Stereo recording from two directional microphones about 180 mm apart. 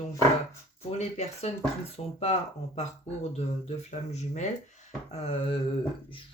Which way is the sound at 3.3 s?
35° left (ahead or behind).